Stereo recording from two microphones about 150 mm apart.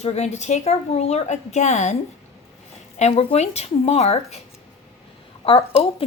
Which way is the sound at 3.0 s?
45° left (ahead or behind).